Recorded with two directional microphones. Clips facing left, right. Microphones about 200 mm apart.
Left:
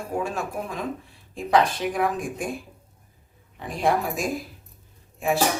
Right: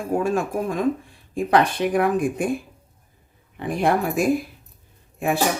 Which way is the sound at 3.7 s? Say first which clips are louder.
Right 3 dB; 60° right (ahead or behind).